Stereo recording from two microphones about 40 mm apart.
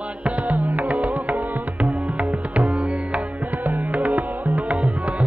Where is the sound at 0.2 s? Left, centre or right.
Right.